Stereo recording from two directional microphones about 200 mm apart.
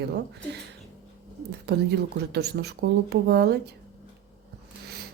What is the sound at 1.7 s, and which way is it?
Speech, 55° right (ahead or behind).